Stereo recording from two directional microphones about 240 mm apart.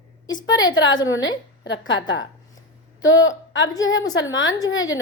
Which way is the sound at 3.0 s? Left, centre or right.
Left.